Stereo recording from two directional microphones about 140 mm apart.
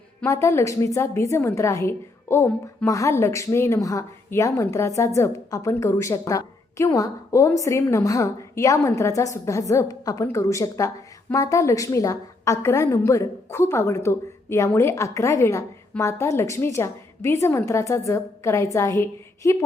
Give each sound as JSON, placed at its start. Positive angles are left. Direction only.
{"t": 0.3, "sound": "a woman's voice", "side_deg": 20}